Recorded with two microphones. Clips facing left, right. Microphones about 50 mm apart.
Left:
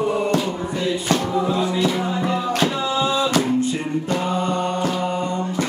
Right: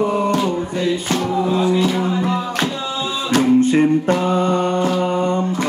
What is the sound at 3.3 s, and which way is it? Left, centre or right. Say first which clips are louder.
Music: right 6 dB; right.